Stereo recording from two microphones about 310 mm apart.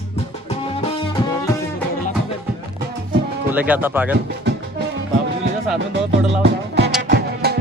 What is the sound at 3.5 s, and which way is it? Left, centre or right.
Speech, centre.